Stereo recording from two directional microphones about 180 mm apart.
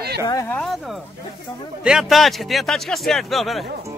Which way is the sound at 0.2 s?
20° left (ahead or behind).